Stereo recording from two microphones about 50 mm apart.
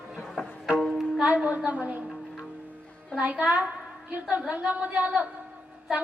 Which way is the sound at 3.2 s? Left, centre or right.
Right.